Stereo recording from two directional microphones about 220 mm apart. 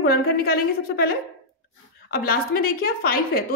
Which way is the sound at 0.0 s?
45° left (ahead or behind).